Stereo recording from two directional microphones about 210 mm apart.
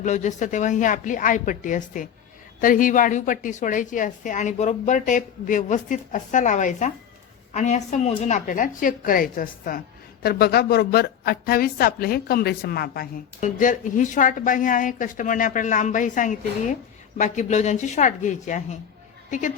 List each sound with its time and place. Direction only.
0.0 s a woman's voice: 35° left (ahead or behind)